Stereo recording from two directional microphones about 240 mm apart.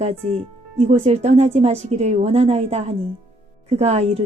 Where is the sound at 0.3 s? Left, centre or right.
Right.